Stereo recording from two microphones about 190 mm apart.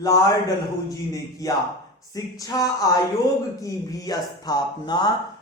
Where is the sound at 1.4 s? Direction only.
20° left (ahead or behind).